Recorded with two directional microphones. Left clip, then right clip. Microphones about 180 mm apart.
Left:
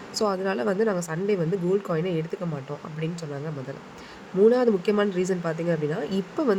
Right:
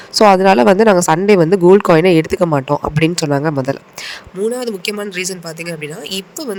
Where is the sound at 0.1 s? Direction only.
55° right (ahead or behind).